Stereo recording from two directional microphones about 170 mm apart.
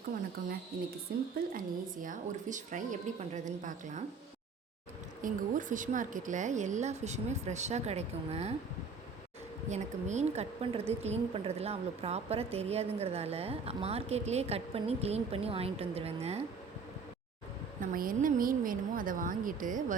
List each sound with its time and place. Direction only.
1.1 s a woman's voice: 70° right (ahead or behind)
1.5 s speech: 50° right (ahead or behind)
5.2 s speech: 50° right (ahead or behind)
9.6 s a woman's voice: 45° right (ahead or behind)
17.7 s speech: 55° right (ahead or behind)